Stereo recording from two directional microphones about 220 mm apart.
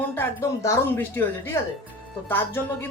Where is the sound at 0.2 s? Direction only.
10° left (ahead or behind).